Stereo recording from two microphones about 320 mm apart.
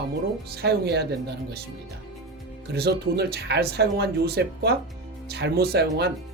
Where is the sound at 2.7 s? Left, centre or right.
Right.